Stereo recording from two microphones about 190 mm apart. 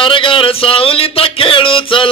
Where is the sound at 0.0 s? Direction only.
25° left (ahead or behind).